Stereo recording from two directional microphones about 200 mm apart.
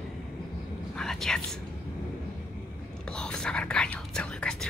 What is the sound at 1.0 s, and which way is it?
Whispering, centre (ahead or behind).